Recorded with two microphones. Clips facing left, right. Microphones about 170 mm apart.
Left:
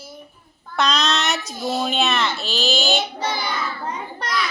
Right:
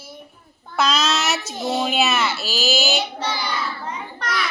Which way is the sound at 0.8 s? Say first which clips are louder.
Even; 5° right (ahead or behind).